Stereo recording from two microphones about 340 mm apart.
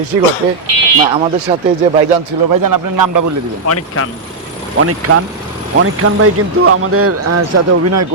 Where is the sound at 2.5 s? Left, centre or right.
Right.